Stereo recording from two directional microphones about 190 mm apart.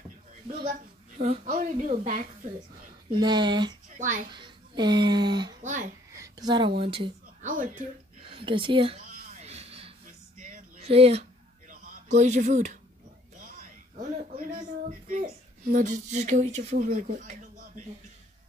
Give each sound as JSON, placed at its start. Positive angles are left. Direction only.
{"t": 0.7, "sound": "a woman's voice", "side_deg": -40}
{"t": 3.1, "sound": "speech", "side_deg": -25}
{"t": 4.0, "sound": "a woman's voice", "side_deg": -45}
{"t": 4.3, "sound": "speech", "side_deg": -25}
{"t": 5.6, "sound": "a child's voice", "side_deg": -40}
{"t": 6.1, "sound": "a sound", "side_deg": -20}
{"t": 6.8, "sound": "speech", "side_deg": -30}
{"t": 7.4, "sound": "a woman's voice", "side_deg": -45}
{"t": 8.2, "sound": "speech", "side_deg": -30}
{"t": 9.0, "sound": "a sound", "side_deg": -35}
{"t": 11.8, "sound": "speech", "side_deg": -40}